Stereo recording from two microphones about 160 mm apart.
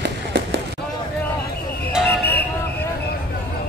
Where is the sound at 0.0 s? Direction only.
90° right.